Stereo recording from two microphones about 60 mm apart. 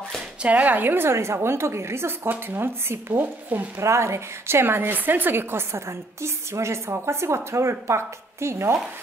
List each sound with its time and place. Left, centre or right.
0.4 s a woman's voice: right
2.2 s speech: right
3.8 s a woman's voice: right